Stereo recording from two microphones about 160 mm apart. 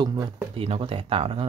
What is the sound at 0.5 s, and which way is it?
Speech, 35° right (ahead or behind).